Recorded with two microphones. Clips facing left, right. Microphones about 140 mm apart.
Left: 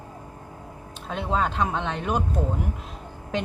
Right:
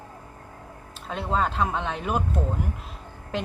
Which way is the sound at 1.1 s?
Centre (ahead or behind).